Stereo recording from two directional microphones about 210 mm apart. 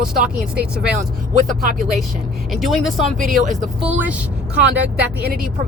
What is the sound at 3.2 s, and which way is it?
Speech, 40° right (ahead or behind).